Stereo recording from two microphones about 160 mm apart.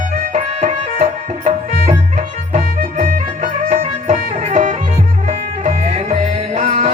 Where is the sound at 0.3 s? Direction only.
45° right (ahead or behind).